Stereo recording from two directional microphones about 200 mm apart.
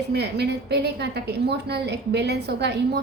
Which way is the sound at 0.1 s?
55° right (ahead or behind).